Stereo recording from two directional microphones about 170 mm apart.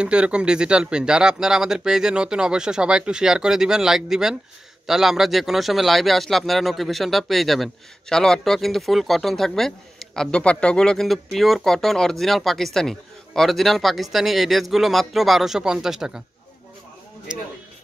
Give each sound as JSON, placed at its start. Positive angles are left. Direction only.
{"t": 0.0, "sound": "speech", "side_deg": -5}
{"t": 17.3, "sound": "speech", "side_deg": -5}